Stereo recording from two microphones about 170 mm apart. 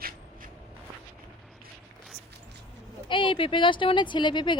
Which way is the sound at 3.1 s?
30° left (ahead or behind).